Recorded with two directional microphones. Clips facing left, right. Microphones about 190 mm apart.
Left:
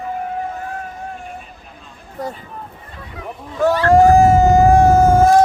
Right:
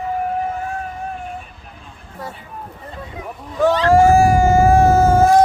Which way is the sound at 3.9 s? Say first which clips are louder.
Left 3 dB; 20° left (ahead or behind).